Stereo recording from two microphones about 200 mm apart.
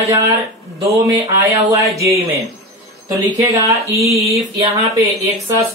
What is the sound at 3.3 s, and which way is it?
Speech, 15° right (ahead or behind).